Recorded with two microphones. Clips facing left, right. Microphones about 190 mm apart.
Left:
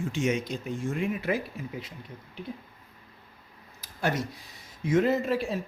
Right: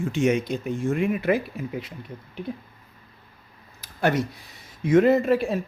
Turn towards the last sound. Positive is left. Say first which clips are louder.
# right 7 dB
turn(degrees=-55)  # may be behind; listen again after turning